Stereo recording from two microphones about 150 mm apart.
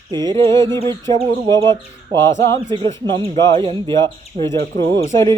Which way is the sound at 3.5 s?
35° right (ahead or behind).